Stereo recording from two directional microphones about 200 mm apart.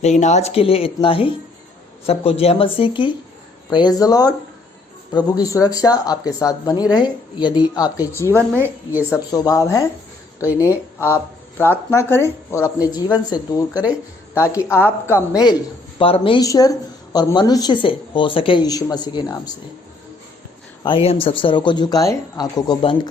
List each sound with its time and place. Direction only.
0.0 s speech: 35° left (ahead or behind); by 8.4 s 10° left (ahead or behind)
8.5 s a woman's voice: 10° right (ahead or behind)
9.0 s speech: 15° left (ahead or behind)
20.8 s speech: 25° left (ahead or behind)